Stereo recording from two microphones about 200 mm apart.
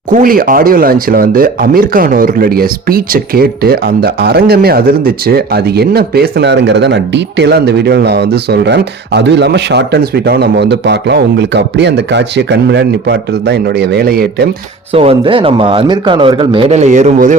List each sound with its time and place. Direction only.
0.1 s speech: 45° right (ahead or behind)
14.9 s a man's voice: 25° right (ahead or behind)